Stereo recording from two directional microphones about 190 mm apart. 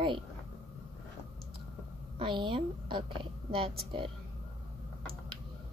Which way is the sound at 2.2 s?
25° right (ahead or behind).